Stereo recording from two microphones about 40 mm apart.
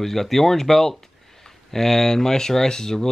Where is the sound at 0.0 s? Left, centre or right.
Centre.